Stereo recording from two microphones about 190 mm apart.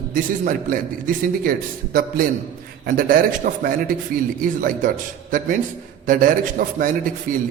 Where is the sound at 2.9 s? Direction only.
45° right (ahead or behind).